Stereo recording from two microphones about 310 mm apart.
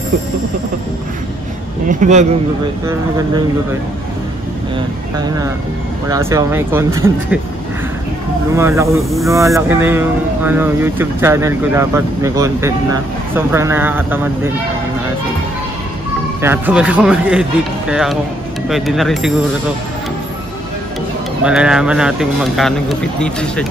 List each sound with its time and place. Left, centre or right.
1.9 s speech: right
6.0 s speech: centre
8.5 s speech: centre
16.3 s speech: centre
21.5 s speech: centre